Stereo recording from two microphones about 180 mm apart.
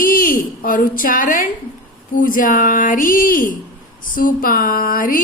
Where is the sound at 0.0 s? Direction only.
50° left (ahead or behind).